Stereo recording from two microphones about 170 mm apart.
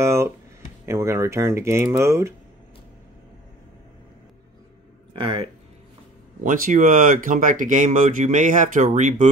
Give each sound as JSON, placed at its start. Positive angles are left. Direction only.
{"t": 0.0, "sound": "speech", "side_deg": -15}
{"t": 5.1, "sound": "speech", "side_deg": -30}
{"t": 6.4, "sound": "speech", "side_deg": -50}